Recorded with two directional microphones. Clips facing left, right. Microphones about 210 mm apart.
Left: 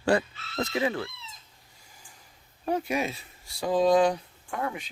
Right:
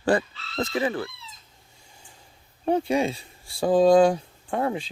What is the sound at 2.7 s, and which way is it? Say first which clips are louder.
Speech: right 5 dB; 30° right (ahead or behind).